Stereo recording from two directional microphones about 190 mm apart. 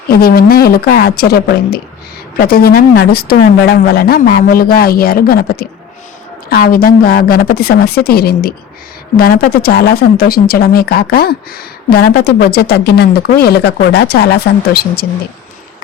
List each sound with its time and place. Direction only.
0.1 s a woman's voice: 55° left (ahead or behind)